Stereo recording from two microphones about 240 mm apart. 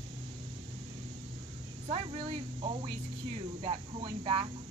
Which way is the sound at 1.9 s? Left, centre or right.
Right.